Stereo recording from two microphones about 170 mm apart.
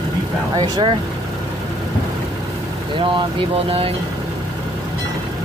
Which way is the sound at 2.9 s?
30° right (ahead or behind).